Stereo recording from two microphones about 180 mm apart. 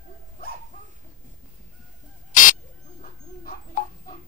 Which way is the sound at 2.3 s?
45° left (ahead or behind).